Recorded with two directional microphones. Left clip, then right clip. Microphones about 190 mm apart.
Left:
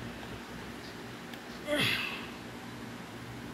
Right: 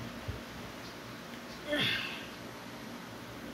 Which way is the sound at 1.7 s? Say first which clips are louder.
Left 2 dB; 20° left (ahead or behind).